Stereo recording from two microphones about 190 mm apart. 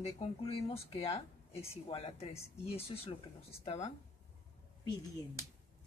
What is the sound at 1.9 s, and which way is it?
Speech, 30° left (ahead or behind).